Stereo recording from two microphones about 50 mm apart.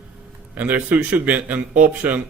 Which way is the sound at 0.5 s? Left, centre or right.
Right.